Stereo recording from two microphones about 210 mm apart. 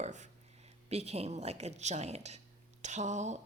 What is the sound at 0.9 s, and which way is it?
Speech, 30° right (ahead or behind).